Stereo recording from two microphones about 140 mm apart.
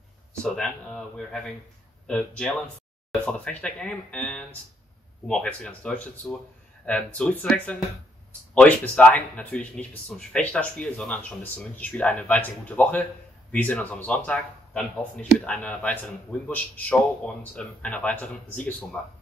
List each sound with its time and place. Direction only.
0.3 s speech: 5° left (ahead or behind)